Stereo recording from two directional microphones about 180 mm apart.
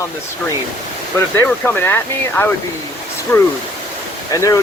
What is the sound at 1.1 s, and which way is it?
Speech, 10° left (ahead or behind).